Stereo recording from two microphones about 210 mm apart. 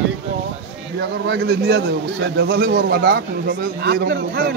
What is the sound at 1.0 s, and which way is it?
A man's voice, 50° right (ahead or behind).